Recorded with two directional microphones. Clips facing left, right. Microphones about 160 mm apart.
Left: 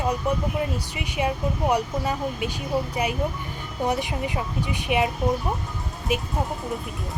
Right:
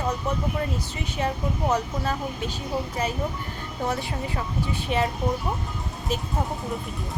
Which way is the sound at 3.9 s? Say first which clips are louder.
Left 3 dB; 15° left (ahead or behind).